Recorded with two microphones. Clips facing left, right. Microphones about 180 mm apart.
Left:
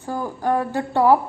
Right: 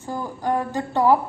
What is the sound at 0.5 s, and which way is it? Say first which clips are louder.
Speech: left 2 dB; 10° left (ahead or behind).